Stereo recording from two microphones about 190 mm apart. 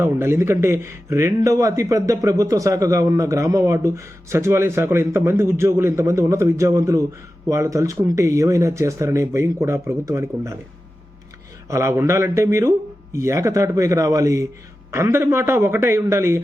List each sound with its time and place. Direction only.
0.0 s speech: 15° right (ahead or behind)
11.7 s speech: 15° right (ahead or behind)